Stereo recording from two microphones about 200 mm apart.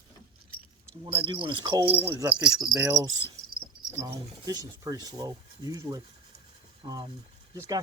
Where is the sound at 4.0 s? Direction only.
20° right (ahead or behind).